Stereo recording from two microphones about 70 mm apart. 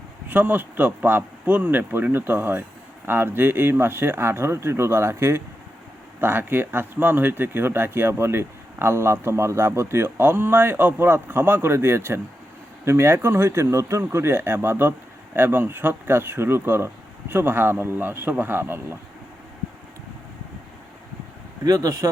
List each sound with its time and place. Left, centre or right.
0.3 s speech: right
6.1 s speech: right
21.6 s speech: right